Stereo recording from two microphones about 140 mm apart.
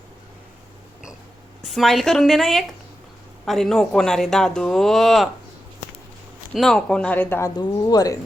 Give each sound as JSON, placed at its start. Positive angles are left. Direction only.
{"t": 1.6, "sound": "speech", "side_deg": 0}
{"t": 6.5, "sound": "speech", "side_deg": 0}
{"t": 7.5, "sound": "speech", "side_deg": 30}